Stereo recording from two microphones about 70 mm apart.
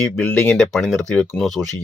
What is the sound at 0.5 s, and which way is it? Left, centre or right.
Speech, centre.